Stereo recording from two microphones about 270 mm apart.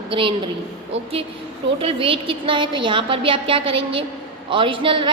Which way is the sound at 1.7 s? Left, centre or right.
Centre.